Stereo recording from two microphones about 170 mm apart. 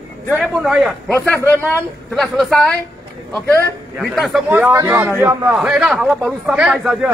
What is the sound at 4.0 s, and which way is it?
Speech, centre (ahead or behind).